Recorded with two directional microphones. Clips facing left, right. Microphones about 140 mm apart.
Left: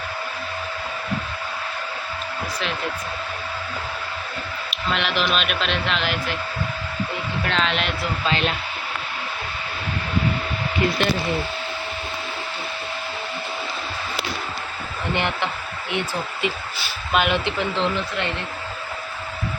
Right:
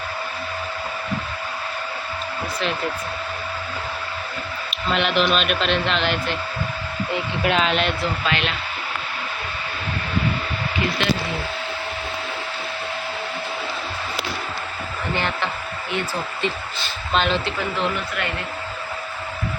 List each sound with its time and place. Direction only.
4.9 s a man's voice: centre (ahead or behind)
7.4 s a man's voice: 5° right (ahead or behind)
8.3 s speech: 35° left (ahead or behind)
15.1 s speech: 20° left (ahead or behind)
16.8 s speech: 10° left (ahead or behind)